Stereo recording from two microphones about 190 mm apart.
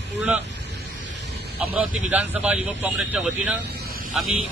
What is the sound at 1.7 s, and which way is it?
Speech, 10° right (ahead or behind).